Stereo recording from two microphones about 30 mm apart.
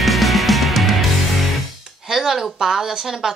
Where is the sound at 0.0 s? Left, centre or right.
Centre.